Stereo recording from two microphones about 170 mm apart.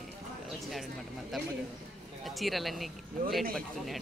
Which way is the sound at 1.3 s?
Centre (ahead or behind).